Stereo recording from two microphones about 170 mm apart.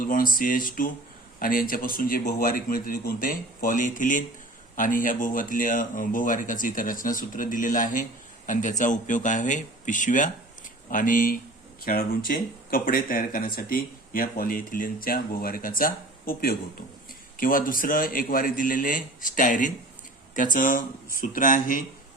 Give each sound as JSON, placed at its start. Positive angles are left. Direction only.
{"t": 0.0, "sound": "speech", "side_deg": 55}